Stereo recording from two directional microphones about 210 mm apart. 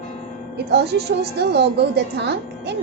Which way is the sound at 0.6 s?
50° right (ahead or behind).